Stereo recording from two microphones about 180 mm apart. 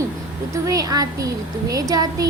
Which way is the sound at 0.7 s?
20° right (ahead or behind).